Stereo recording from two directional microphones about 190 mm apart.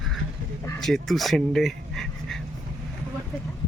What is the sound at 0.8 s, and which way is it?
Speech, centre (ahead or behind).